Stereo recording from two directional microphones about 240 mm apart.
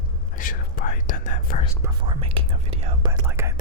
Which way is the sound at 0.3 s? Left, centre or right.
Left.